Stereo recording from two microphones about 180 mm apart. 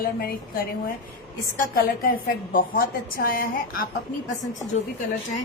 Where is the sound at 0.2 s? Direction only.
55° left (ahead or behind).